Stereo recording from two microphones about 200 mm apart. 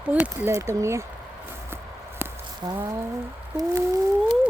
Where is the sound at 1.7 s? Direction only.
10° right (ahead or behind).